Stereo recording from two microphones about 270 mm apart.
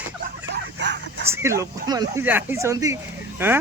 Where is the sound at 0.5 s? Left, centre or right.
Right.